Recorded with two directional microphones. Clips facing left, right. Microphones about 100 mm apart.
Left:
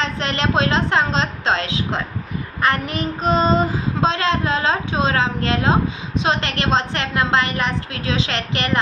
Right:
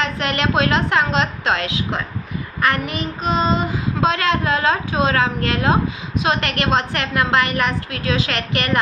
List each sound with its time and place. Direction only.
0.0 s child singing: 30° left (ahead or behind)